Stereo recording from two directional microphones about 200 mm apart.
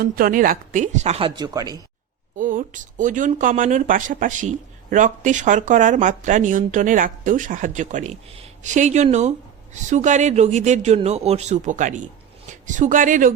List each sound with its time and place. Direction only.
0.0 s speech: 45° right (ahead or behind)
1.4 s speech: 20° right (ahead or behind)
2.4 s speech: 40° right (ahead or behind)